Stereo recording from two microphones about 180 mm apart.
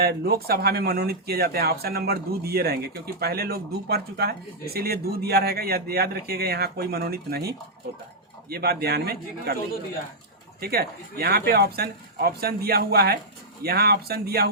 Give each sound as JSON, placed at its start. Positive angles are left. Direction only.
{"t": 0.0, "sound": "speech", "side_deg": -60}
{"t": 10.6, "sound": "speech", "side_deg": -60}